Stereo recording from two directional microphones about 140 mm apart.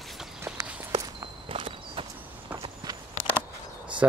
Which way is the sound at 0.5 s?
5° right (ahead or behind).